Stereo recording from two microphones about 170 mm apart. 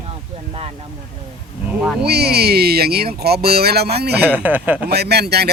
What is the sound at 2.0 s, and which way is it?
Speech, 70° right (ahead or behind).